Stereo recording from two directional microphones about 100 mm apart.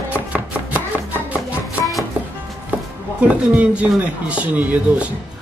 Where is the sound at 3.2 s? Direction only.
10° right (ahead or behind).